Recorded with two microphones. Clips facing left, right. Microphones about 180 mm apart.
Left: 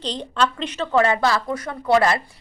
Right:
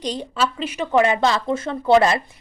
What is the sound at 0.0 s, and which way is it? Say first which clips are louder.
A woman's voice: even; 10° right (ahead or behind).